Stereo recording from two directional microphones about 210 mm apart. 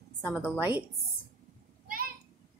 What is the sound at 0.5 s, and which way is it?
Speech, 10° right (ahead or behind).